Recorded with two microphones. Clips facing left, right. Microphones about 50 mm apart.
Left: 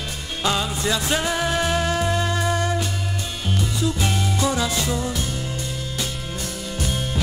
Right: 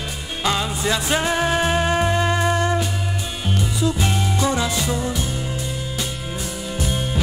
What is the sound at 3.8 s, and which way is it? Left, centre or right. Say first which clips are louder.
Music: right 2 dB; centre.